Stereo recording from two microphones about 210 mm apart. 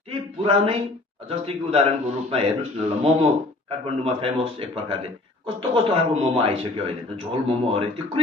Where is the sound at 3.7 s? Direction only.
30° right (ahead or behind).